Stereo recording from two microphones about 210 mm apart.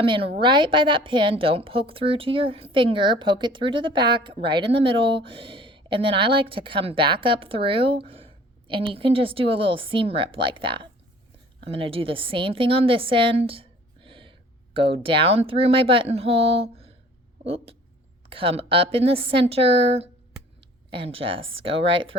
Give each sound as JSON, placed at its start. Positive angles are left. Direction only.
{"t": 0.0, "sound": "a woman's voice", "side_deg": -25}